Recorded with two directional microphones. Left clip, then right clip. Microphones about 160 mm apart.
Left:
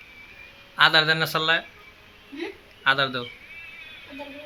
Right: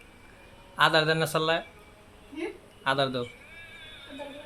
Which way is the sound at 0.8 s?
10° right (ahead or behind).